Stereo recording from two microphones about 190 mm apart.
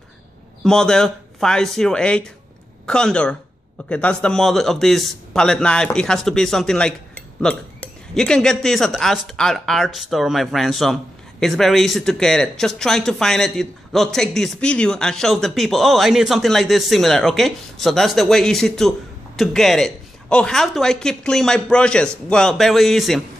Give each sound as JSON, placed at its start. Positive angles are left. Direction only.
{"t": 0.7, "sound": "speech", "side_deg": 5}